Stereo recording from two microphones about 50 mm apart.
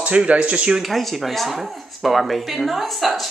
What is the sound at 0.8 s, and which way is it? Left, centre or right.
Speech, centre.